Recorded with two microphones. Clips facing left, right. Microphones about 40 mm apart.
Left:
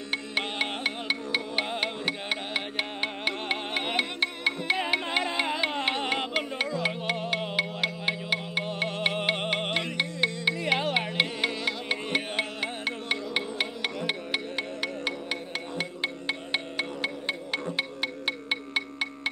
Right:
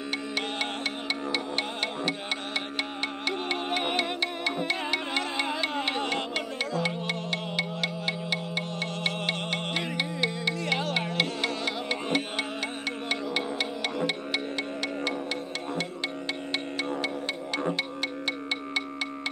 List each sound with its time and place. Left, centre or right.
0.4 s music: centre
3.3 s music: centre
17.7 s music: centre